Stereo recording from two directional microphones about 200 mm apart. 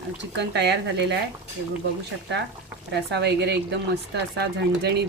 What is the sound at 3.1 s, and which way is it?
Speech, 55° right (ahead or behind).